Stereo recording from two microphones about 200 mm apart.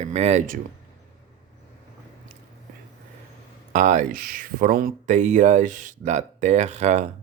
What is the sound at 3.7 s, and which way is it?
Speech, 40° right (ahead or behind).